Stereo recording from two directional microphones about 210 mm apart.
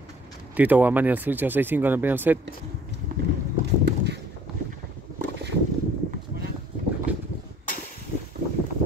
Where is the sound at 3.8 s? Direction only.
55° right (ahead or behind).